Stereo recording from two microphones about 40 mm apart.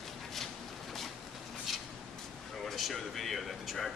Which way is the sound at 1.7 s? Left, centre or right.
Centre.